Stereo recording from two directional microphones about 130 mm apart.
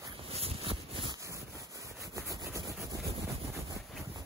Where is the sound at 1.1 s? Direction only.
25° right (ahead or behind).